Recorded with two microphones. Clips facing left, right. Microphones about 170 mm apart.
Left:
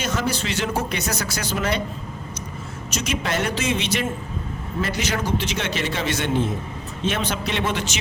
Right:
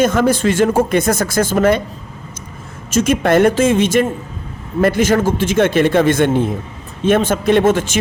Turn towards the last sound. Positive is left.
turn(degrees=-50)  # may be behind; listen again after turning